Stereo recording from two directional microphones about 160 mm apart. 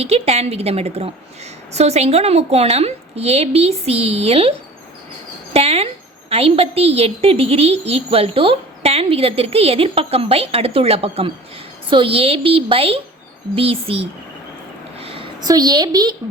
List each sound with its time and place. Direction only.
0.0 s a woman's voice: 40° right (ahead or behind)
5.5 s a woman's voice: 40° right (ahead or behind)
14.9 s a sound: 35° right (ahead or behind)